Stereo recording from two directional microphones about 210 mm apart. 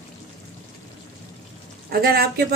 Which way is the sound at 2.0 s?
50° right (ahead or behind).